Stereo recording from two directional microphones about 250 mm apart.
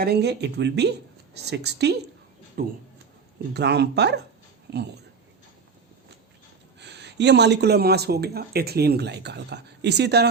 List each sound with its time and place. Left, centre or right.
0.0 s speech: right
6.7 s speech: right